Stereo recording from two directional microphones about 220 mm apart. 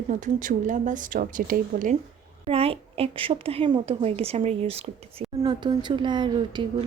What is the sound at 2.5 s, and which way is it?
Speech, 25° right (ahead or behind).